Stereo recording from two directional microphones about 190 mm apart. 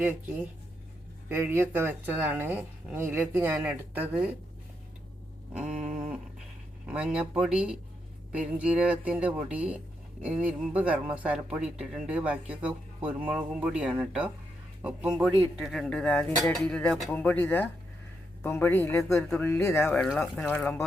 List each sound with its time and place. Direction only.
0.0 s speech: 10° right (ahead or behind)
5.6 s a sound: 40° right (ahead or behind)
6.8 s speech: 5° right (ahead or behind); by 20.8 s 10° left (ahead or behind)